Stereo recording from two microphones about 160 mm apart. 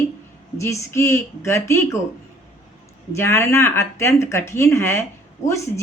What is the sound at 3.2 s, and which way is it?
Speech, 15° left (ahead or behind).